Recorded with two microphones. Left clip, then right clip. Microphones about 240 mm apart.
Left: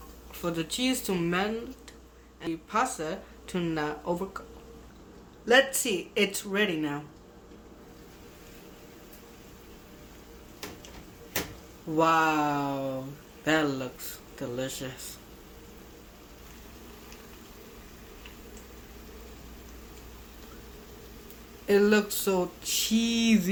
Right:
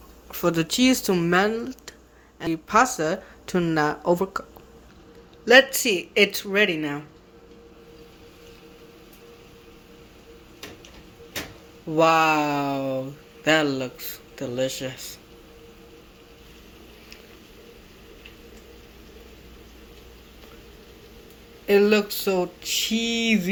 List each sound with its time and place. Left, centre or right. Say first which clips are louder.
0.3 s speech: right 9 dB; right
5.5 s speech: right 7 dB; centre
11.9 s speech: right 5 dB; centre
21.7 s speech: right 5 dB; centre